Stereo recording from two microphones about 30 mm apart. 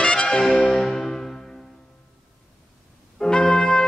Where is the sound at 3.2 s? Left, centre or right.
Left.